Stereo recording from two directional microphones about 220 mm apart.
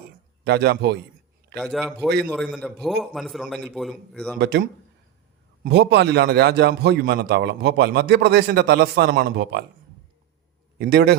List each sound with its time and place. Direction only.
0.4 s a man's voice: 45° right (ahead or behind)
1.5 s a man's voice: centre (ahead or behind)
2.0 s a man's voice: 50° right (ahead or behind)
2.3 s a man's voice: centre (ahead or behind)
4.4 s a man's voice: 50° right (ahead or behind)
5.6 s a man's voice: 50° right (ahead or behind)
10.8 s a man's voice: 50° right (ahead or behind)